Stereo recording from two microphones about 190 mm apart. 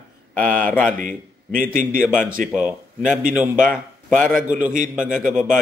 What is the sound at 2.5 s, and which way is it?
A man's voice, 5° right (ahead or behind).